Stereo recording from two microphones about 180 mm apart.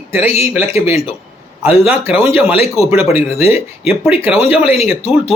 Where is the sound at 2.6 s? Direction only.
35° left (ahead or behind).